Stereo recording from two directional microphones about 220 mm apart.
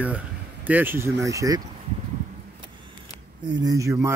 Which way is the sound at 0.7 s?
10° right (ahead or behind).